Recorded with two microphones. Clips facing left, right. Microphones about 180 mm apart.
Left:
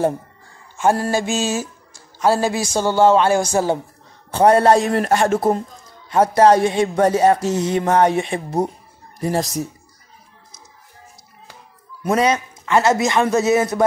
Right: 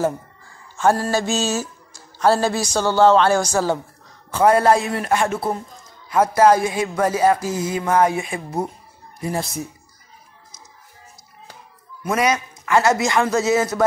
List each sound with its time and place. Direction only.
0.7 s mantra: 15° left (ahead or behind)
1.1 s a man's voice: 10° left (ahead or behind)
4.3 s a man's voice: 35° left (ahead or behind)
6.0 s a man's voice: 30° left (ahead or behind)
7.3 s music: 75° left (ahead or behind)
7.7 s a man's voice: 30° left (ahead or behind)
12.0 s a man's voice: 30° left (ahead or behind)